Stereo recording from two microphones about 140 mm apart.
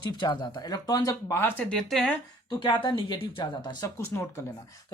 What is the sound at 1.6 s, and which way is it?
Speech, 5° left (ahead or behind).